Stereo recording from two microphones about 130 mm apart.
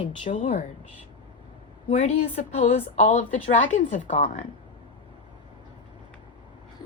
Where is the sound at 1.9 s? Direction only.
55° left (ahead or behind).